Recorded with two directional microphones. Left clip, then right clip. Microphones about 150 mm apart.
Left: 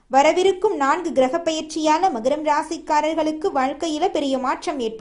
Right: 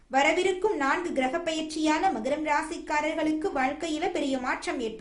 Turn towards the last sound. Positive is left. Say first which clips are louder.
# left 7 dB
turn(degrees=35)  # may be behind; listen again after turning